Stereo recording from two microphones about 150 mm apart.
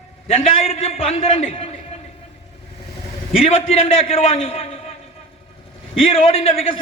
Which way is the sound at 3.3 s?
40° left (ahead or behind).